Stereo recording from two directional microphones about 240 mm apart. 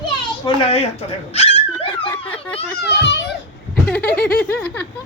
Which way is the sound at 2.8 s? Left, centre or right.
Left.